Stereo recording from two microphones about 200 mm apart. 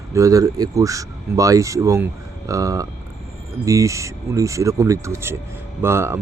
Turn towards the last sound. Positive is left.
turn(degrees=-10)  # may be behind; listen again after turning